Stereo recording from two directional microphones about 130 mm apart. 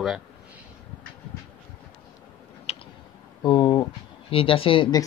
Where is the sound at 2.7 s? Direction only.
55° left (ahead or behind).